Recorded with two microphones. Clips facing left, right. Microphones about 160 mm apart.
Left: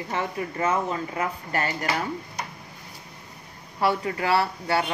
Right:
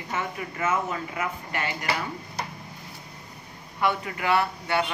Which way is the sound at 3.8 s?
35° left (ahead or behind).